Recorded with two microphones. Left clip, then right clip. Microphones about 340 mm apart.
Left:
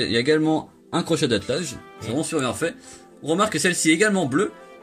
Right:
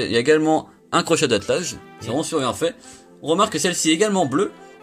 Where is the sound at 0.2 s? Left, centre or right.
Right.